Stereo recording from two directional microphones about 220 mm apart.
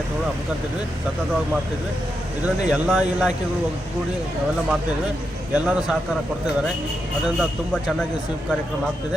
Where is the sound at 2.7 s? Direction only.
5° right (ahead or behind).